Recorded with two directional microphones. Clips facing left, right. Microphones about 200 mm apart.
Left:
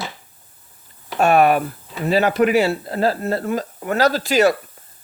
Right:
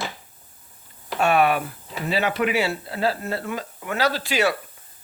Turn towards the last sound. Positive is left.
turn(degrees=40)  # may be behind; listen again after turning